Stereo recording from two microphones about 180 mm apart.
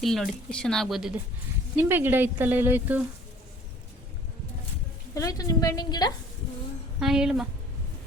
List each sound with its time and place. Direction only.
0.0 s speech: centre (ahead or behind)
5.1 s a woman's voice: 20° left (ahead or behind)
7.0 s speech: centre (ahead or behind)